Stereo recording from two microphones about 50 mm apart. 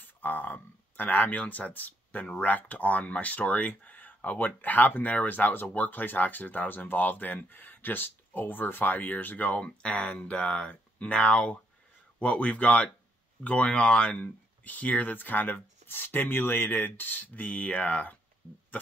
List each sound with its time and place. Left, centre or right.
0.0 s speech: left